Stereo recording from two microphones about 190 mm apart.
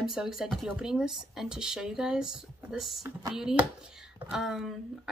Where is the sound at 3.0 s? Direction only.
20° right (ahead or behind).